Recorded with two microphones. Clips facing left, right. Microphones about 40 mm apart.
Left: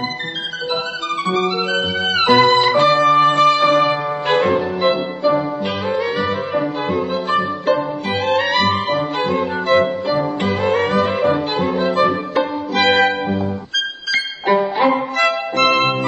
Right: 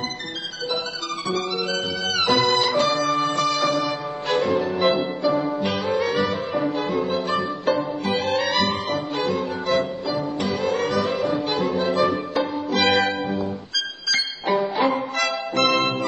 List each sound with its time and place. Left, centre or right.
1.2 s music: left
4.8 s music: centre
7.2 s music: left
14.6 s music: left
15.1 s music: left